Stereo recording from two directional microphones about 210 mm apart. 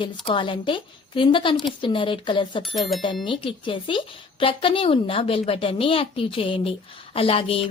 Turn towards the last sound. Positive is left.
turn(degrees=25)  # may be behind; listen again after turning